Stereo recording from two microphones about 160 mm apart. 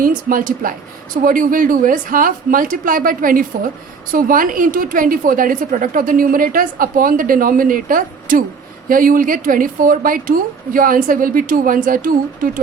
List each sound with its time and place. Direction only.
0.0 s a woman's voice: 60° right (ahead or behind)